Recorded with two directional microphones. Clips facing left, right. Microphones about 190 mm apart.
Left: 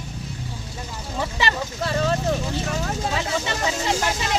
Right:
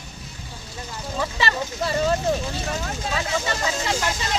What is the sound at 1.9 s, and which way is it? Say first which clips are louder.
Speech: right 1 dB; 5° right (ahead or behind).